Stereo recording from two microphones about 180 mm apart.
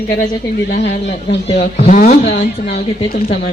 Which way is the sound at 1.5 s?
35° left (ahead or behind).